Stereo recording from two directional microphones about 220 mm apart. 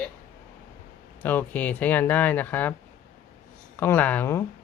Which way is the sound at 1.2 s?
10° left (ahead or behind).